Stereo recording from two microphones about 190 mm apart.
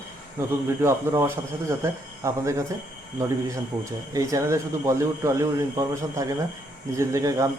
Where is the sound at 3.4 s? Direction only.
15° right (ahead or behind).